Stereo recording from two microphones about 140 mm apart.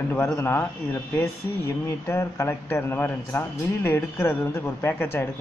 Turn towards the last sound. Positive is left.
turn(degrees=15)  # may be behind; listen again after turning